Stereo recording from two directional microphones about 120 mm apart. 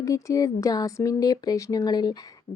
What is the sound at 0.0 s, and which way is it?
Speech, 25° left (ahead or behind).